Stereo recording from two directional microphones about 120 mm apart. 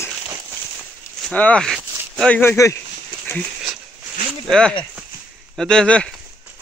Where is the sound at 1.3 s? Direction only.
10° left (ahead or behind).